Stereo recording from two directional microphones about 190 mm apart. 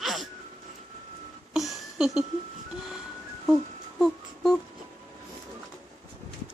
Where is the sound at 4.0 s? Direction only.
Centre (ahead or behind).